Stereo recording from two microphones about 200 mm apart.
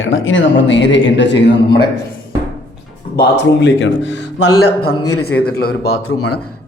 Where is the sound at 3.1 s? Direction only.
60° left (ahead or behind).